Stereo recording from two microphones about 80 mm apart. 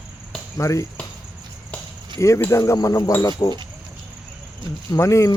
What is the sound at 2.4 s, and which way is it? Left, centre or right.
Speech, left.